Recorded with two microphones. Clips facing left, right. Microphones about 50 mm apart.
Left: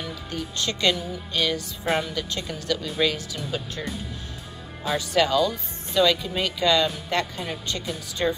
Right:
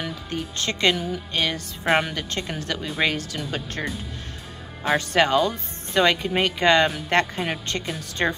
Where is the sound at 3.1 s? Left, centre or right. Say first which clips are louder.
Right 2 dB; right.